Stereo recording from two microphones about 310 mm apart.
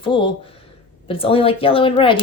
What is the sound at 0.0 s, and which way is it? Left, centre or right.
Speech, centre.